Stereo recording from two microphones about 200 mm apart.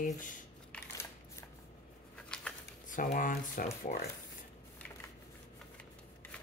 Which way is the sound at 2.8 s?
40° left (ahead or behind).